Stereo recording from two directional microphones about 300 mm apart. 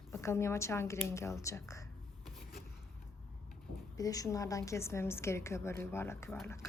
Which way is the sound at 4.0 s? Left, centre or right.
Centre.